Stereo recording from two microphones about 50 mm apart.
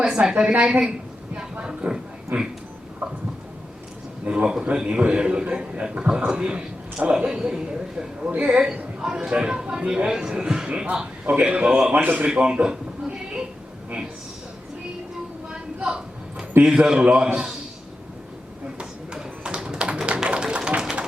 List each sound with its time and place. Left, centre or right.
0.3 s a man's voice: right
1.6 s a sound: centre
3.0 s a man's voice: right
4.3 s a man's voice: centre
11.9 s a man's voice: right
12.2 s a man's voice: centre
15.4 s a sound: centre
16.6 s a man's voice: centre
18.8 s tap: centre